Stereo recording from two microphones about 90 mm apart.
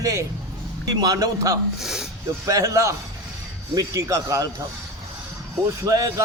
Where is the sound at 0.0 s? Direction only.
40° right (ahead or behind).